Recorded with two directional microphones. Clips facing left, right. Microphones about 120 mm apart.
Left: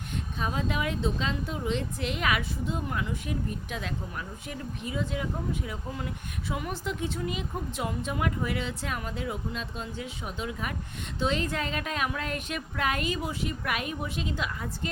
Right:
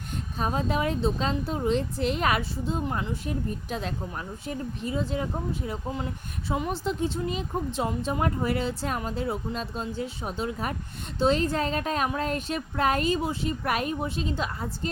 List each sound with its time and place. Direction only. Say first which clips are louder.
0.3 s a woman's voice: right 4 dB; 40° right (ahead or behind)